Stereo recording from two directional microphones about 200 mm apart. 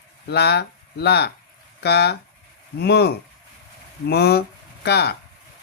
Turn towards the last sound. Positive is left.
turn(degrees=55)  # may be behind; listen again after turning